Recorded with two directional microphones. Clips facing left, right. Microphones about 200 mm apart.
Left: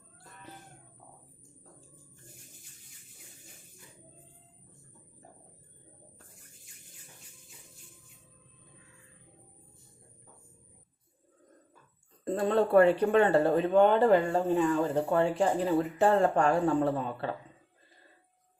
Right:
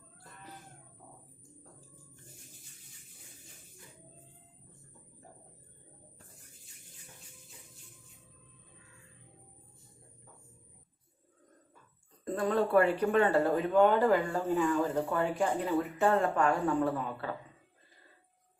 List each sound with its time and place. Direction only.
12.2 s speech: 30° left (ahead or behind)